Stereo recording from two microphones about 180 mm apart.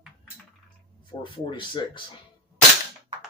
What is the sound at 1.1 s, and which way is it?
Speech, 25° left (ahead or behind).